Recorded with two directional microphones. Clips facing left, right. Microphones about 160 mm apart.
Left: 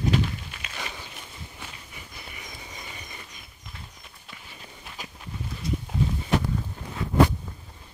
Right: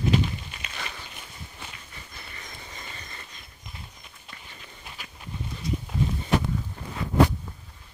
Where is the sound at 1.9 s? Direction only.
10° left (ahead or behind).